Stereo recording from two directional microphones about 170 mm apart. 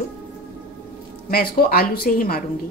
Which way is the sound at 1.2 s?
60° left (ahead or behind).